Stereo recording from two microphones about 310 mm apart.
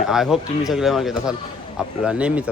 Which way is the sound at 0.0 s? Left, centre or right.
Centre.